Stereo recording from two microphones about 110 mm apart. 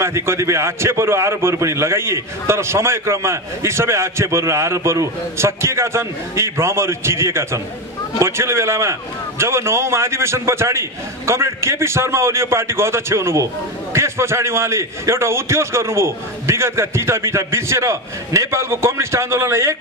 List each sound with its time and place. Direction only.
0.0 s a man's voice: 25° right (ahead or behind)